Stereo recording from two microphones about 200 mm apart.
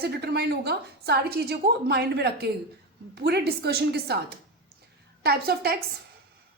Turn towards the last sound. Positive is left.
turn(degrees=-50)  # may be behind; listen again after turning